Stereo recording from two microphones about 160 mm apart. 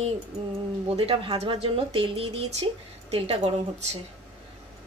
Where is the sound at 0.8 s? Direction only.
35° right (ahead or behind).